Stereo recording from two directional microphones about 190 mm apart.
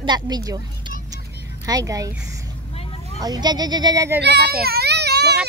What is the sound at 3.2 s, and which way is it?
Speech, 20° right (ahead or behind).